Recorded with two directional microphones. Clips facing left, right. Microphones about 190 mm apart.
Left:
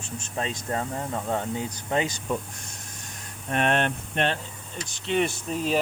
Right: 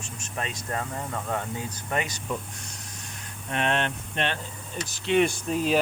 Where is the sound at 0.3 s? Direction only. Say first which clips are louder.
Left 3 dB; 25° left (ahead or behind).